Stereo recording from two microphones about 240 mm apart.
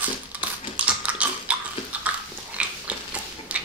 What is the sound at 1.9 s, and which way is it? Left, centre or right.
Biting, centre.